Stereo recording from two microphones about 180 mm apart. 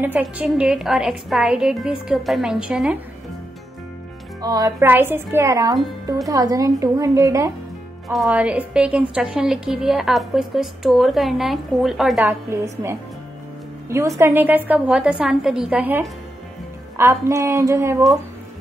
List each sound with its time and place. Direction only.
0.0 s a woman's voice: 10° right (ahead or behind)
4.4 s speech: 20° right (ahead or behind)
8.1 s a woman's voice: centre (ahead or behind)
12.3 s a woman's voice: 15° right (ahead or behind)